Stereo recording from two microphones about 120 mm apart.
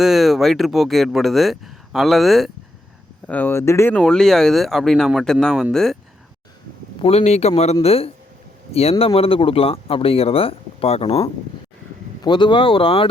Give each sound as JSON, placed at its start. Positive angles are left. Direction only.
{"t": 0.0, "sound": "speech", "side_deg": 0}
{"t": 3.2, "sound": "speech", "side_deg": 15}
{"t": 4.0, "sound": "speech", "side_deg": 5}
{"t": 7.0, "sound": "speech", "side_deg": 65}
{"t": 12.2, "sound": "speech", "side_deg": 40}